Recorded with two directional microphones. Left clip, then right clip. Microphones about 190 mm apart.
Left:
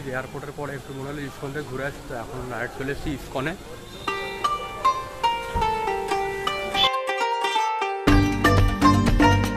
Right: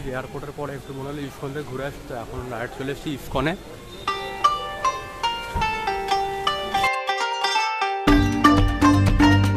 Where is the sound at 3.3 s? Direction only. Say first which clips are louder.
Right 5 dB; 45° right (ahead or behind).